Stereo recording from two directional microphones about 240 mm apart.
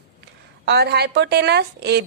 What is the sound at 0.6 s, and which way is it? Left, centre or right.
A woman's voice, right.